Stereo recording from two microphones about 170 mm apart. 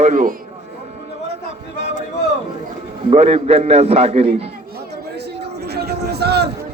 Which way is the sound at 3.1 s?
35° right (ahead or behind).